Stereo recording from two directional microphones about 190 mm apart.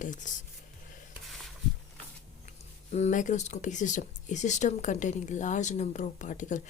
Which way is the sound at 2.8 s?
35° left (ahead or behind).